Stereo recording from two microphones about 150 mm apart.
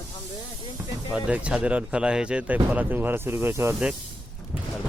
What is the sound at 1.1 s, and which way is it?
Speech, 10° right (ahead or behind).